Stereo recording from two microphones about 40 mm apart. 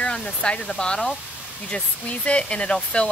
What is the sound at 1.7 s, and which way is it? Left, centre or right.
Speech, left.